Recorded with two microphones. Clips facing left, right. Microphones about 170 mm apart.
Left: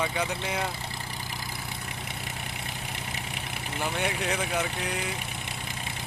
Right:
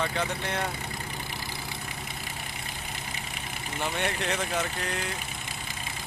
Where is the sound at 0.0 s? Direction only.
5° left (ahead or behind).